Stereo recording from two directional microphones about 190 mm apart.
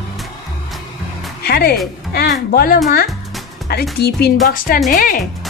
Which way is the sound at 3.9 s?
55° left (ahead or behind).